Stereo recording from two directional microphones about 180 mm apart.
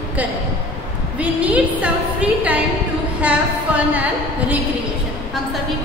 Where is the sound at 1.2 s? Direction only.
5° right (ahead or behind).